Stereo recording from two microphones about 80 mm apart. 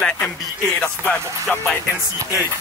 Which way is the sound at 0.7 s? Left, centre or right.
Left.